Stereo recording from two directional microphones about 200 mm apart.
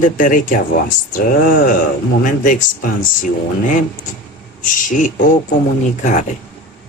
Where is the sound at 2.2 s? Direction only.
40° left (ahead or behind).